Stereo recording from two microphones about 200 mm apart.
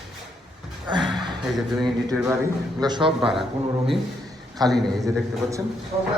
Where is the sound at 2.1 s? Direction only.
15° right (ahead or behind).